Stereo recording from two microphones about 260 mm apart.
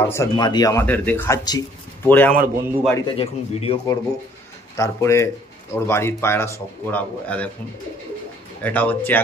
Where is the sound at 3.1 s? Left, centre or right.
Left; by 7.5 s centre.